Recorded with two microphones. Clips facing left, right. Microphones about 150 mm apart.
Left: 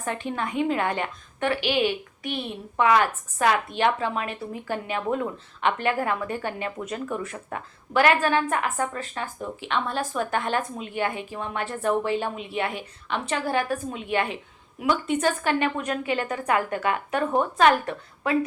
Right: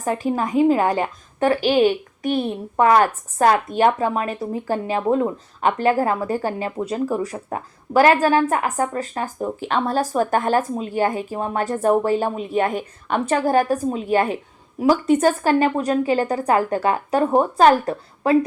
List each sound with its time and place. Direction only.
0.0 s a woman's voice: 35° right (ahead or behind)